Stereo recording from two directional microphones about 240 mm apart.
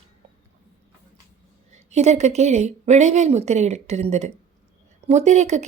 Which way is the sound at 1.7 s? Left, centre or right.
Right.